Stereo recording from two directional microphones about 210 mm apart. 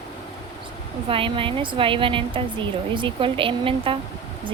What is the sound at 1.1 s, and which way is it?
Speech, 25° right (ahead or behind).